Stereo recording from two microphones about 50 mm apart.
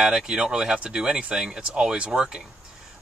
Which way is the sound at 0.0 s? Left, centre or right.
Centre.